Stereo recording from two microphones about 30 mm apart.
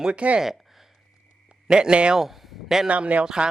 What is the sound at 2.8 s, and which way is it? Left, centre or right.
Speech, right.